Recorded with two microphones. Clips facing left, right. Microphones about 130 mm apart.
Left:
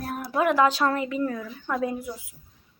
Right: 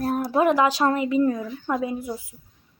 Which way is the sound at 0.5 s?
15° right (ahead or behind).